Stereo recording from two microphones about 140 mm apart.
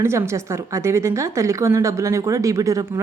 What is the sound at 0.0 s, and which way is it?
A woman's voice, 20° right (ahead or behind).